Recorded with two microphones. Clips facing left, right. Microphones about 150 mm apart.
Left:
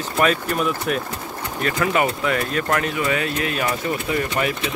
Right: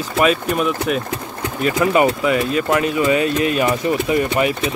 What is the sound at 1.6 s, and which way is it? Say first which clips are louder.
Speech: right 5 dB; 20° right (ahead or behind).